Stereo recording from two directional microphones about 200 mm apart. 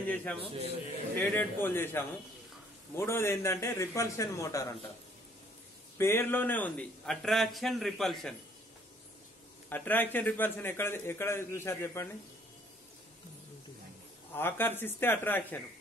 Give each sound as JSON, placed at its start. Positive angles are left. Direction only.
{"t": 0.1, "sound": "a man's voice", "side_deg": 10}
{"t": 0.4, "sound": "a man's voice", "side_deg": -30}
{"t": 1.3, "sound": "a man's voice", "side_deg": 10}
{"t": 5.9, "sound": "a man's voice", "side_deg": 10}
{"t": 9.7, "sound": "a man's voice", "side_deg": 10}
{"t": 14.3, "sound": "a man's voice", "side_deg": 10}